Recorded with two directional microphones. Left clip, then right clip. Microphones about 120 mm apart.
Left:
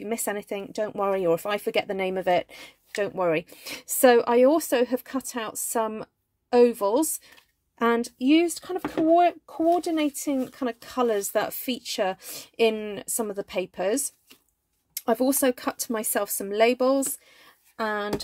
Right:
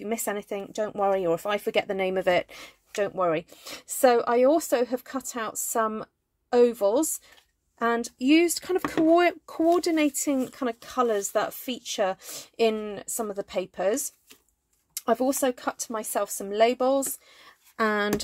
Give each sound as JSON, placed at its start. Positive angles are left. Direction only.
{"t": 0.0, "sound": "speech", "side_deg": 10}
{"t": 3.2, "sound": "speech", "side_deg": 25}
{"t": 8.2, "sound": "speech", "side_deg": -10}
{"t": 8.5, "sound": "speech", "side_deg": -30}
{"t": 10.4, "sound": "speech", "side_deg": 0}
{"t": 15.0, "sound": "a sound", "side_deg": 10}
{"t": 15.2, "sound": "speech", "side_deg": 25}
{"t": 15.5, "sound": "speech", "side_deg": 40}
{"t": 17.3, "sound": "a sound", "side_deg": 0}
{"t": 17.7, "sound": "speech", "side_deg": -20}